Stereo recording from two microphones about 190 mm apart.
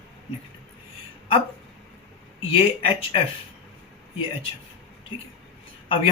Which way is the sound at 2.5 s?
30° left (ahead or behind).